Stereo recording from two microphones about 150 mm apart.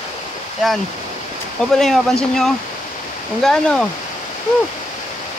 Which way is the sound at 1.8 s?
Centre (ahead or behind).